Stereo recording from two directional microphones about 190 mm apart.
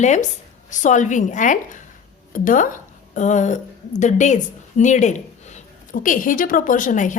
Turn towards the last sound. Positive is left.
turn(degrees=40)  # may be behind; listen again after turning